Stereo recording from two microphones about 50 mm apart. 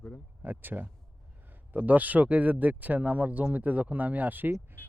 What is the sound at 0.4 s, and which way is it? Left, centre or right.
Speech, right.